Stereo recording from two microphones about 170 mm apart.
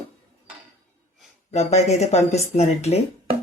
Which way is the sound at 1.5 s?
40° left (ahead or behind).